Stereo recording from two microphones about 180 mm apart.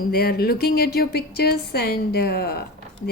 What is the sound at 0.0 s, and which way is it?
A woman's voice, 60° left (ahead or behind).